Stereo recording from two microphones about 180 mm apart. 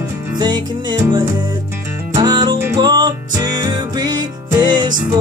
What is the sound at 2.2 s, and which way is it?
Music, 25° right (ahead or behind).